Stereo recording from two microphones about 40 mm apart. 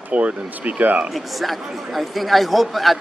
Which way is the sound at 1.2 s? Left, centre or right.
Centre.